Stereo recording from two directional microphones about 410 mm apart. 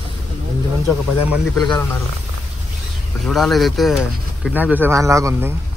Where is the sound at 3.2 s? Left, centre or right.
Centre.